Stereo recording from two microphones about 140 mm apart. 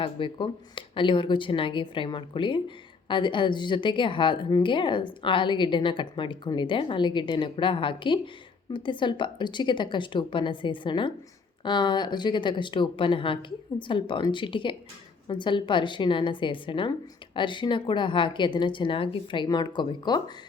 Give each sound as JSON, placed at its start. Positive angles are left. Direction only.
{"t": 0.0, "sound": "speech", "side_deg": 35}